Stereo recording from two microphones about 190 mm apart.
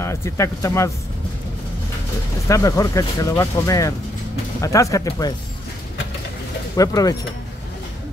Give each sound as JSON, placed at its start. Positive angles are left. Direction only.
{"t": 0.0, "sound": "speech", "side_deg": 15}
{"t": 2.4, "sound": "speech", "side_deg": 15}
{"t": 6.8, "sound": "speech", "side_deg": 20}